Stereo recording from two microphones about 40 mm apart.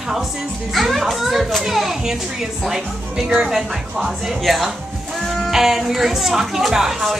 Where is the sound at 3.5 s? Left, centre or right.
Centre.